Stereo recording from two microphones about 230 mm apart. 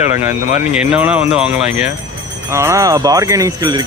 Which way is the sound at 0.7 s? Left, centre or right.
Centre.